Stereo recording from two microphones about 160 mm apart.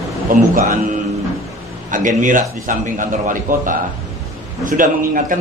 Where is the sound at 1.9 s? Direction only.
55° right (ahead or behind).